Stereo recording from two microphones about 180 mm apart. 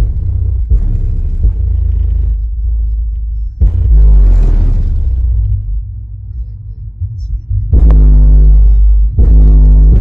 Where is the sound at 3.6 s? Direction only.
Centre (ahead or behind).